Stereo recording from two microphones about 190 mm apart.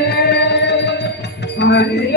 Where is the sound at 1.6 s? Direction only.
65° left (ahead or behind).